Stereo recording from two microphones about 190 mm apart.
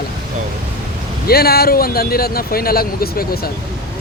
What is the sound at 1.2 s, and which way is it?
Speech, 55° left (ahead or behind).